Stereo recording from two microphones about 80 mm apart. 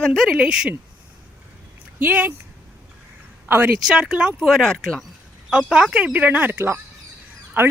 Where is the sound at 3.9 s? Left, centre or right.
Centre.